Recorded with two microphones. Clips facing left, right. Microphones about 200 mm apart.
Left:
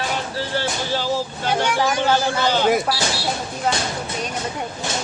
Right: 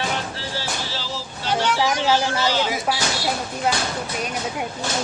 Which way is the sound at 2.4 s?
55° left (ahead or behind).